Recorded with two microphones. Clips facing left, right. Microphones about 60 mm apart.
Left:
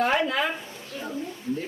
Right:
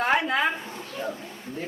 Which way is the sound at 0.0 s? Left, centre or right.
Right.